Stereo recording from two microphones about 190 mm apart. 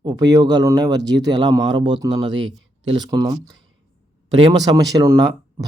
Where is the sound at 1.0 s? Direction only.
65° right (ahead or behind).